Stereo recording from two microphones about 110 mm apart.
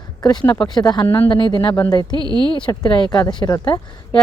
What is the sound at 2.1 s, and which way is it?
Speech, 40° right (ahead or behind).